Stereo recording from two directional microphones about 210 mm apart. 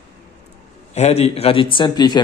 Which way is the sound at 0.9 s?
30° left (ahead or behind).